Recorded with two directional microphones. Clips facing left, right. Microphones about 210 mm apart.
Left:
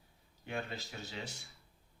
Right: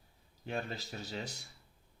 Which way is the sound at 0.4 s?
40° right (ahead or behind).